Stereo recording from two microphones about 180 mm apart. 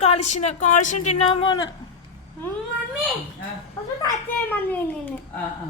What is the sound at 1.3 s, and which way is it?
Speech, 25° left (ahead or behind).